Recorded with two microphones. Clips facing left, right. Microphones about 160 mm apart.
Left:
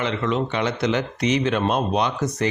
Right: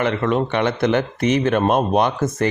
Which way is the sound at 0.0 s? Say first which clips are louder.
Right 4 dB; 55° right (ahead or behind).